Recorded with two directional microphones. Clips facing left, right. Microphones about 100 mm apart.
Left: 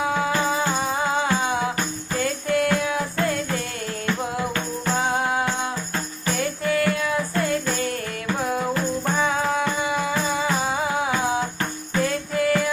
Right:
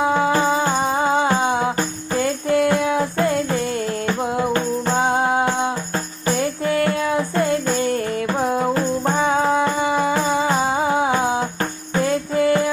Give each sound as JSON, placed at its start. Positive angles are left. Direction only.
{"t": 0.0, "sound": "music", "side_deg": -30}